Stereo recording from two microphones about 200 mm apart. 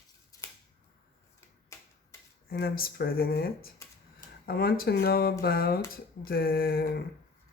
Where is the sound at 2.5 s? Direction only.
50° left (ahead or behind).